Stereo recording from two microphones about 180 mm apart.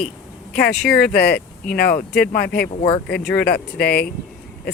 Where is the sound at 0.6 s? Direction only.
60° left (ahead or behind).